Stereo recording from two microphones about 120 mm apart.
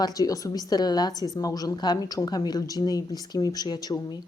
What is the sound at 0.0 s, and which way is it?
A woman's voice, 30° left (ahead or behind).